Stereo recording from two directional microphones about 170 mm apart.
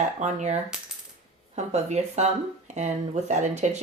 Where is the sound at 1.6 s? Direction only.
40° right (ahead or behind).